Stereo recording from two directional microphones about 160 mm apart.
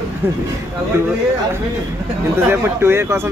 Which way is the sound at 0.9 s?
15° right (ahead or behind).